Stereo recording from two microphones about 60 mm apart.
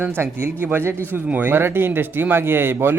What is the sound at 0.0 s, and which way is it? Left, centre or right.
A man's voice, right.